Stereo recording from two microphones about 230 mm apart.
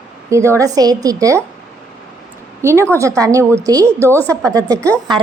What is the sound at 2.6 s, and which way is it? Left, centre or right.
A woman's voice, centre.